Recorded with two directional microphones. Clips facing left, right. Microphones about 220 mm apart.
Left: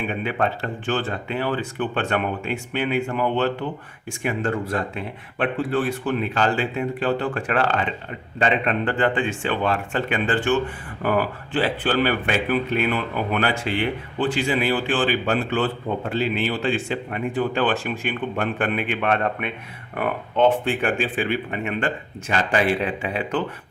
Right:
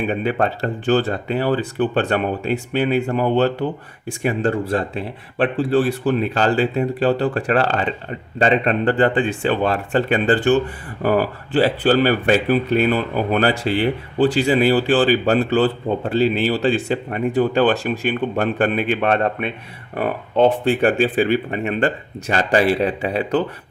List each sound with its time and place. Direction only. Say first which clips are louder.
0.1 s speech: right 4 dB; 40° right (ahead or behind)